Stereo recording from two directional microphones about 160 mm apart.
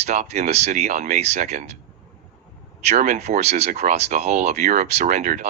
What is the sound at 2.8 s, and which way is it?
Speech, 45° right (ahead or behind).